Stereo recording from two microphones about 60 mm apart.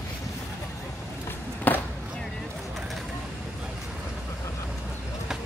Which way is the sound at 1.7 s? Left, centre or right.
Left.